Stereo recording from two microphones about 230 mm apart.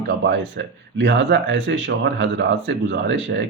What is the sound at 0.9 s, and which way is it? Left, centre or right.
Speech, right.